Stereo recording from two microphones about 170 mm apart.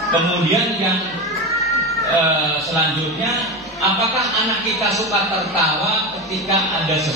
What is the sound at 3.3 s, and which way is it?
A man's voice, centre (ahead or behind).